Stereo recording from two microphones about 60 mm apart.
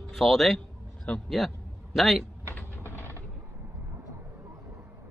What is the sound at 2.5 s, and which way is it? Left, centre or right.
Mechanisms, left.